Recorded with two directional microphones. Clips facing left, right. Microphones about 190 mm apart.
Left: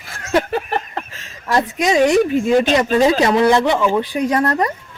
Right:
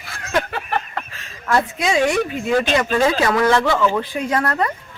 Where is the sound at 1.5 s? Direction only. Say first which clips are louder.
Left 2 dB; 15° left (ahead or behind).